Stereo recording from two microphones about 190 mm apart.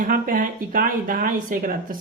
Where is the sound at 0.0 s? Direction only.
45° right (ahead or behind).